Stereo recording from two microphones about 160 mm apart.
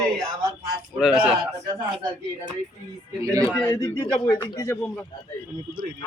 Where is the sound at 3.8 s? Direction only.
20° left (ahead or behind).